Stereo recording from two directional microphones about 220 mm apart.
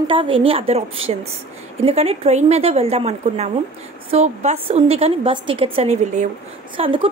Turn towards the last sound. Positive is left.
turn(degrees=-25)  # may be behind; listen again after turning